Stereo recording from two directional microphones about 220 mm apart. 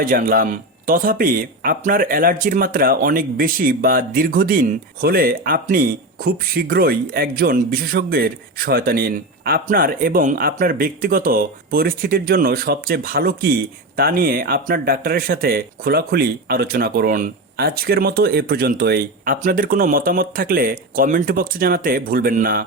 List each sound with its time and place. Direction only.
0.0 s speech: 40° right (ahead or behind)